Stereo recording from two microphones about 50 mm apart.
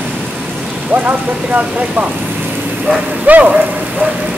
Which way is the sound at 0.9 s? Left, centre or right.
Right.